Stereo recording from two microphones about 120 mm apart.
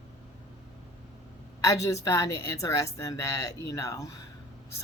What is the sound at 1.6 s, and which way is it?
A woman's voice, 25° left (ahead or behind).